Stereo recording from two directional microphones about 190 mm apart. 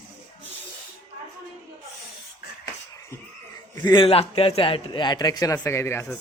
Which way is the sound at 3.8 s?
25° left (ahead or behind).